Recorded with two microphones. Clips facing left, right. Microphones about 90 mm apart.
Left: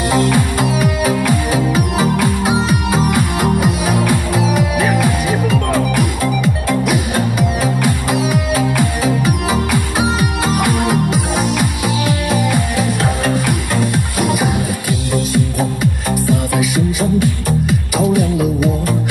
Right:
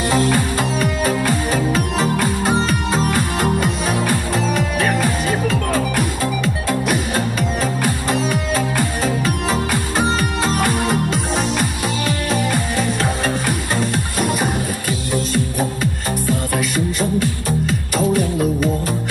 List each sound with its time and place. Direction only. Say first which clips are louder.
0.6 s music: left 3 dB; 5° left (ahead or behind)